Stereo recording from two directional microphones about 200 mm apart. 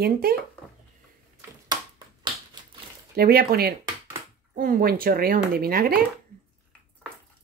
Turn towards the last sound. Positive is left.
turn(degrees=-50)  # may be behind; listen again after turning